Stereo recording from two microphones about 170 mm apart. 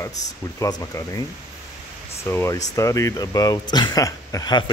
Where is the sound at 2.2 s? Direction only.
15° left (ahead or behind).